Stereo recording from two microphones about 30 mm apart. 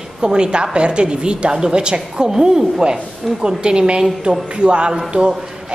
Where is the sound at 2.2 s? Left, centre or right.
Right.